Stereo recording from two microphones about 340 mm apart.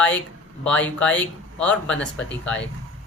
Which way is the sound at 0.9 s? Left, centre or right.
Centre.